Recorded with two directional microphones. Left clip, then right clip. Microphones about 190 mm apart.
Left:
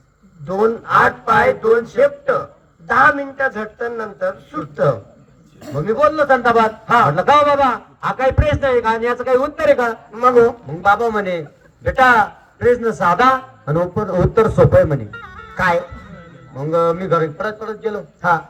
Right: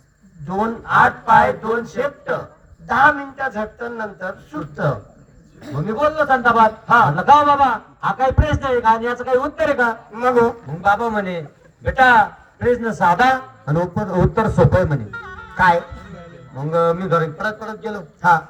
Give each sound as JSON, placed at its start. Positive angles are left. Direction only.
{"t": 0.4, "sound": "a man's voice", "side_deg": 20}
{"t": 5.6, "sound": "a man's voice", "side_deg": 60}
{"t": 6.1, "sound": "a man's voice", "side_deg": 20}